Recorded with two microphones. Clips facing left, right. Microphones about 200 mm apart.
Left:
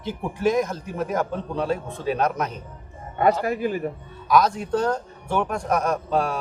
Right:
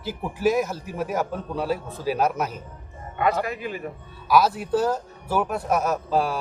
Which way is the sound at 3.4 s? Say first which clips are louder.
Left 6 dB; 40° left (ahead or behind).